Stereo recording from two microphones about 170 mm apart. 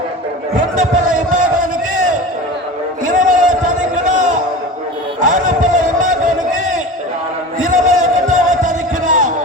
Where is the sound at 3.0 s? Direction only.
50° right (ahead or behind).